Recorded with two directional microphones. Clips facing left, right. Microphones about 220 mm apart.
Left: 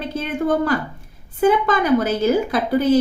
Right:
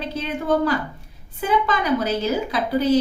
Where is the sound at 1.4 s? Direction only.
50° left (ahead or behind).